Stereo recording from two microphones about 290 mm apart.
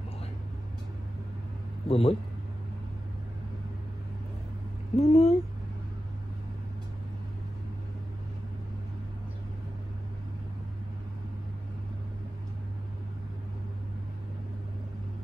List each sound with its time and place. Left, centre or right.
1.9 s a man's voice: left
4.9 s speech: left